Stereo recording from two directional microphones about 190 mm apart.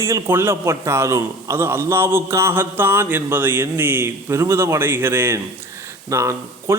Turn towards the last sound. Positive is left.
turn(degrees=-15)  # may be behind; listen again after turning